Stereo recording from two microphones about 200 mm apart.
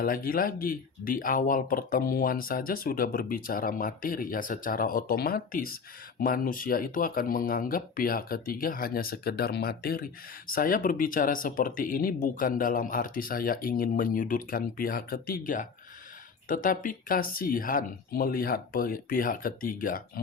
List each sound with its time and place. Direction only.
0.0 s speech: 45° left (ahead or behind)